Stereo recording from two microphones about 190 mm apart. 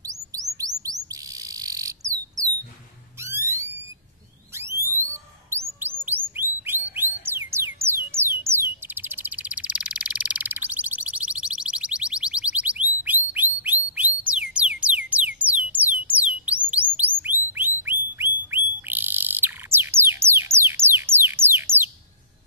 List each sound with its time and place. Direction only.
0.0 s chirp: 20° right (ahead or behind)
1.3 s cricket: 15° right (ahead or behind)
3.2 s a sound: 15° right (ahead or behind)
4.6 s fire alarm: 15° right (ahead or behind)
4.9 s alarm: 10° left (ahead or behind)
5.5 s bird: 10° right (ahead or behind)
14.3 s music: 5° right (ahead or behind)
16.1 s a sound: 5° right (ahead or behind)
16.9 s music: 10° right (ahead or behind)
17.5 s whistle: 10° right (ahead or behind)
18.9 s bird: 10° right (ahead or behind)